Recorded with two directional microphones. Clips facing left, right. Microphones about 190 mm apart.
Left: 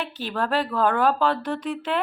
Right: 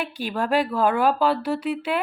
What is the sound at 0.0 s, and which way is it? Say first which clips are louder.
A woman's voice: right 1 dB; 10° right (ahead or behind).